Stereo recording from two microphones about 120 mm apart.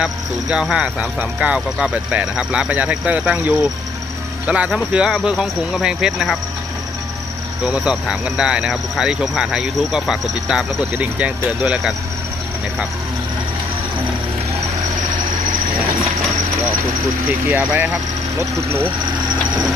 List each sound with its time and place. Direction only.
0.5 s speech: 5° right (ahead or behind)
7.6 s speech: 5° right (ahead or behind)
17.2 s speech: 15° right (ahead or behind)